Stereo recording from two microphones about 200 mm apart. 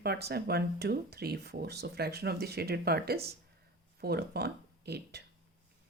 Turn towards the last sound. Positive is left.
turn(degrees=-55)  # may be behind; listen again after turning